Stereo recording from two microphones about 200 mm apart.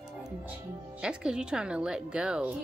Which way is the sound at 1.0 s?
5° right (ahead or behind).